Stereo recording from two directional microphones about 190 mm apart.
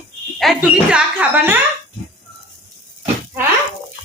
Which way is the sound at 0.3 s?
Centre (ahead or behind).